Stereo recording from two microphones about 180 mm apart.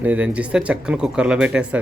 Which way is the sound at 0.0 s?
10° right (ahead or behind).